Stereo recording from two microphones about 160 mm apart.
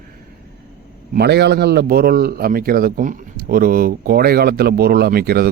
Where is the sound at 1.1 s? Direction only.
85° right.